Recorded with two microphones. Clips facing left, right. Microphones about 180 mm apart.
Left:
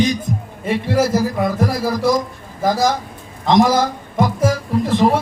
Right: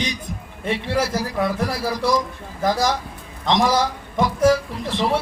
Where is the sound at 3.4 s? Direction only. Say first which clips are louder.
Left 5 dB; 50° left (ahead or behind).